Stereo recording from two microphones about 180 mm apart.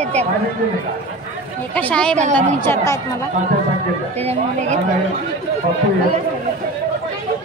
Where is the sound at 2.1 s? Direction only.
40° right (ahead or behind).